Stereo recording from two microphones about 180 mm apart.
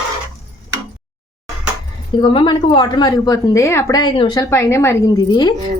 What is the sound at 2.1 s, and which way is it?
A woman's voice, 25° left (ahead or behind).